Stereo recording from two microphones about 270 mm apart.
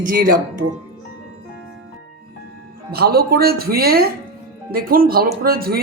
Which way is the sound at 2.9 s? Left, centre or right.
Right.